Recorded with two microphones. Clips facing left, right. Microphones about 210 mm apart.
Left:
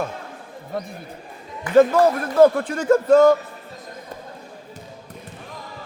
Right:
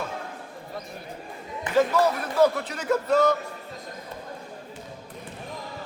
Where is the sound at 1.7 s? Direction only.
50° left (ahead or behind).